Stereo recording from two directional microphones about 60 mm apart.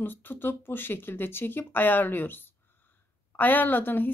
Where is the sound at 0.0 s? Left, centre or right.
Left.